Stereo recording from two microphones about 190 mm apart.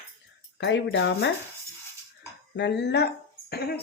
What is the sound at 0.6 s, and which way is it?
Speech, 65° left (ahead or behind).